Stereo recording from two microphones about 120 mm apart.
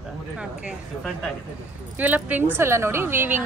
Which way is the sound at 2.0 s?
15° right (ahead or behind).